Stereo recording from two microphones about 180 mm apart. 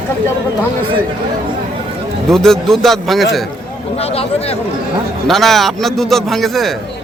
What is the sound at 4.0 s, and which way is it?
Speech, 35° left (ahead or behind).